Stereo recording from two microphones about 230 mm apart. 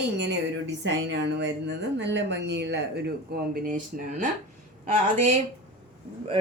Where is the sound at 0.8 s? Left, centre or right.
Right.